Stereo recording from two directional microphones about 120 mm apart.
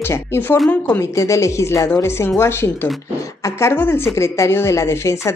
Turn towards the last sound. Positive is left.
turn(degrees=25)  # may be behind; listen again after turning